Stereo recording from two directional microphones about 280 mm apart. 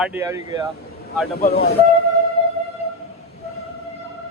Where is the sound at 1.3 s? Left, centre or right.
Left.